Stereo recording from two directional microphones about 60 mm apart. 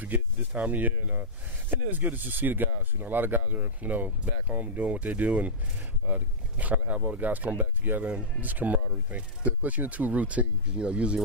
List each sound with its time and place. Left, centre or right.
0.0 s speech: right